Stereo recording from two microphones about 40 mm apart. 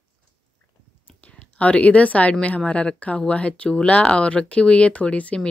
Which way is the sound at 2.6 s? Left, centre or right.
Left.